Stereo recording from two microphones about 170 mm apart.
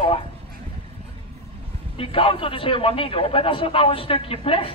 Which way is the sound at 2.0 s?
30° left (ahead or behind).